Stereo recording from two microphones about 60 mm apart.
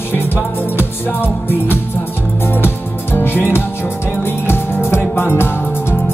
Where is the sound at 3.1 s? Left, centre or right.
Left.